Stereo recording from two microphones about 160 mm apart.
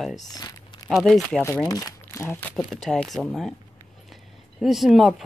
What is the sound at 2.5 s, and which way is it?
Speech, centre (ahead or behind).